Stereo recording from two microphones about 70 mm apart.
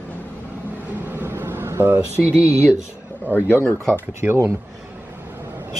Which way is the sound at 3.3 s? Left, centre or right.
Left.